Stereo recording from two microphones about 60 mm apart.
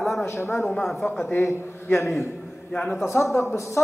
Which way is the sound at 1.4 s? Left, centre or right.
Left.